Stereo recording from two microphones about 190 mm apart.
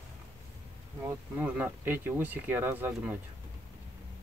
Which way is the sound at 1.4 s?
10° right (ahead or behind).